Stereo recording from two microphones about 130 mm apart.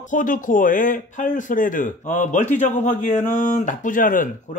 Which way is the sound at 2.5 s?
70° left (ahead or behind).